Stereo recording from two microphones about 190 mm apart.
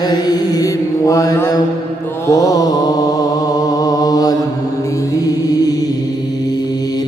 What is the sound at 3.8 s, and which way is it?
Mantra, 20° left (ahead or behind).